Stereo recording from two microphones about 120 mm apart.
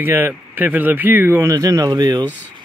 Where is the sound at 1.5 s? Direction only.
30° right (ahead or behind).